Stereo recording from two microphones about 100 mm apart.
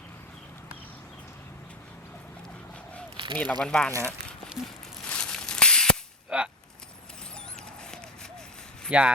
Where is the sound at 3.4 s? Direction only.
10° left (ahead or behind).